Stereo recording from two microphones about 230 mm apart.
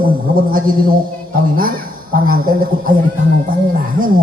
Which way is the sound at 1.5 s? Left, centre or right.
Right.